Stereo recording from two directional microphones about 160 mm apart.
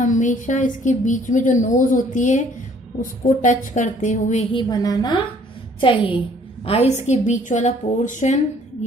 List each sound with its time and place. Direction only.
0.0 s a woman's voice: 50° left (ahead or behind)
4.5 s a woman's voice: 30° left (ahead or behind)
7.1 s a woman's voice: 50° left (ahead or behind)